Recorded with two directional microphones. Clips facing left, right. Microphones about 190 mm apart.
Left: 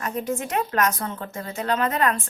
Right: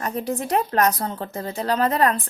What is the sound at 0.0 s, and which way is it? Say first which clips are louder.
A woman's voice: right 1 dB; 35° right (ahead or behind).